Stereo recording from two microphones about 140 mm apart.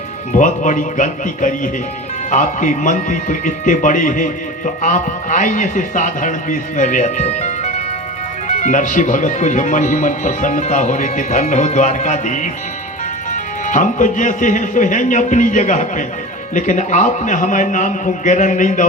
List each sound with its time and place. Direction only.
0.3 s speech: 65° left (ahead or behind)